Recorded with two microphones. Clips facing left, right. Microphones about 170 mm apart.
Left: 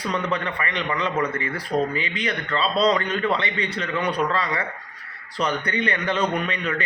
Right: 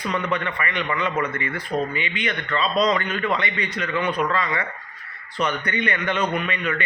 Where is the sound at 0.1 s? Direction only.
35° left (ahead or behind).